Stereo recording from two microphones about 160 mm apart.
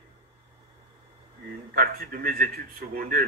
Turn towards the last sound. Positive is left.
turn(degrees=-65)  # may be behind; listen again after turning